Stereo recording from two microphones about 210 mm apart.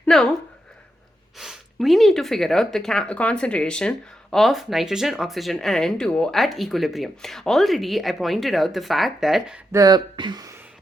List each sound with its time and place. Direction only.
0.0 s a woman's voice: 5° left (ahead or behind)
1.4 s speech: centre (ahead or behind)
9.7 s speech: 20° right (ahead or behind)